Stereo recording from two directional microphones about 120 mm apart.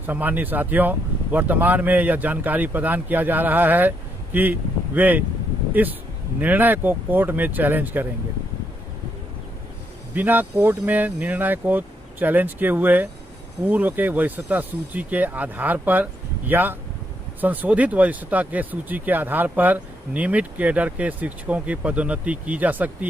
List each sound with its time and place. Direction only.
0.0 s speech: 15° right (ahead or behind)
6.4 s speech: 15° right (ahead or behind)
10.2 s speech: 15° right (ahead or behind)